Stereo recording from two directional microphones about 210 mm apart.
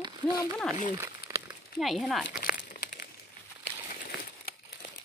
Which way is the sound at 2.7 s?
45° left (ahead or behind).